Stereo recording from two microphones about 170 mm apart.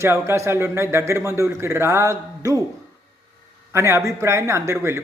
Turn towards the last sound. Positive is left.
turn(degrees=-15)  # may be behind; listen again after turning